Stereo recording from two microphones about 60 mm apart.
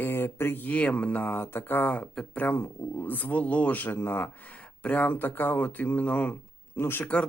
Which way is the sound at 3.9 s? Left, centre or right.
Left.